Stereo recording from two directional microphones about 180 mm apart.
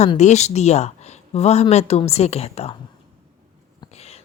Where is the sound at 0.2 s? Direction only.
40° left (ahead or behind).